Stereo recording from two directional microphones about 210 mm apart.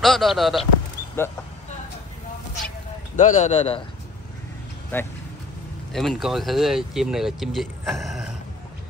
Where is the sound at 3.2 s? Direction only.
35° left (ahead or behind).